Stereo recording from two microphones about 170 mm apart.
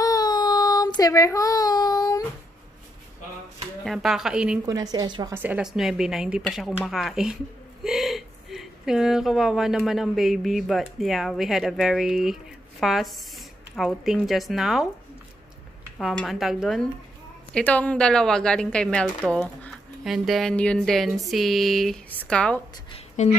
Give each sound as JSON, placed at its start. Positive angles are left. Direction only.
{"t": 0.0, "sound": "child singing", "side_deg": 20}
{"t": 3.8, "sound": "speech", "side_deg": 0}
{"t": 4.6, "sound": "a woman's voice", "side_deg": -20}
{"t": 5.3, "sound": "speech", "side_deg": -10}
{"t": 16.0, "sound": "speech", "side_deg": 0}
{"t": 22.8, "sound": "a sound", "side_deg": 40}